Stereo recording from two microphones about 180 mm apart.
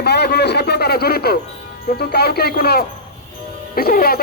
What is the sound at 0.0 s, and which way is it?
A man's voice, 65° left (ahead or behind).